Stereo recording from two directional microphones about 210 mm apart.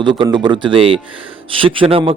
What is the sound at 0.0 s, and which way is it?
A man's voice, 25° right (ahead or behind).